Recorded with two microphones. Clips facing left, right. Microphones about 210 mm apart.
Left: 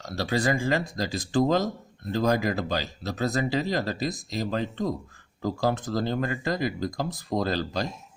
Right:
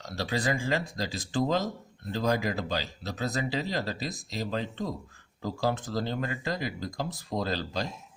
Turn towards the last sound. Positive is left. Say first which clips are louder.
# left 4 dB
turn(degrees=45)  # may be behind; listen again after turning